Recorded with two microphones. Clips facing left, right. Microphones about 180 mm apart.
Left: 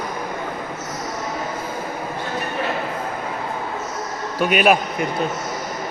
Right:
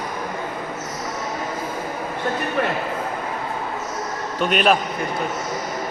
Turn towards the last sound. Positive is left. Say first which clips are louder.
# left 2 dB
turn(degrees=10)  # may be behind; listen again after turning